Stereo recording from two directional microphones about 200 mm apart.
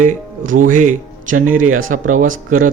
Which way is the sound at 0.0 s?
40° right (ahead or behind).